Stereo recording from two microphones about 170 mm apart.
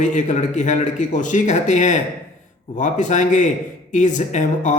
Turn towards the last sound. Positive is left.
turn(degrees=45)  # may be behind; listen again after turning